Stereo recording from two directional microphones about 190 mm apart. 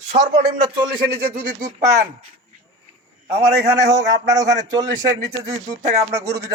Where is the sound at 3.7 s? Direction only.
15° right (ahead or behind).